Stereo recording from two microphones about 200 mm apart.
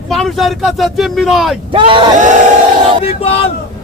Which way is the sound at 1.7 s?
25° right (ahead or behind).